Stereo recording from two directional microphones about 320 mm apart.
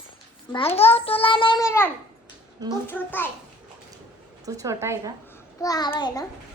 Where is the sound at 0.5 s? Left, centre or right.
Centre.